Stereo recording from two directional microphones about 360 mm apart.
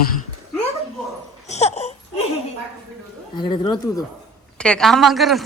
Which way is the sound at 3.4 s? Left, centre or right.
Centre.